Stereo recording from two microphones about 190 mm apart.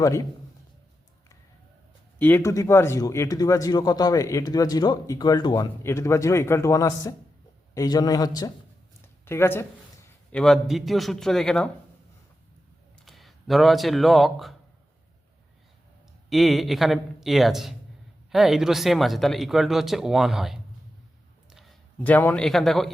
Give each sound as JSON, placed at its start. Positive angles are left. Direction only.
{"t": 0.0, "sound": "speech", "side_deg": 15}
{"t": 2.1, "sound": "a man's voice", "side_deg": 10}
{"t": 10.3, "sound": "speech", "side_deg": 0}
{"t": 13.1, "sound": "speech", "side_deg": 0}
{"t": 16.3, "sound": "a man's voice", "side_deg": 0}